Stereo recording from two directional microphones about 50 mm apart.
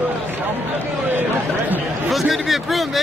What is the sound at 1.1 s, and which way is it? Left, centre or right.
Speech, right.